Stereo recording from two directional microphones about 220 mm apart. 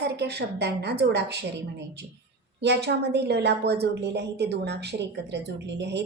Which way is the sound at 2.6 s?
50° right (ahead or behind).